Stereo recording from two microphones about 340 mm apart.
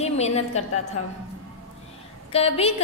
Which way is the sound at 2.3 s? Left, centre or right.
Centre.